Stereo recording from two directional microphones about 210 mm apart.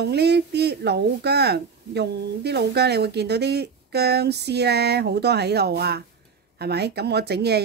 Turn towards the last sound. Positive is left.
turn(degrees=-50)  # may be behind; listen again after turning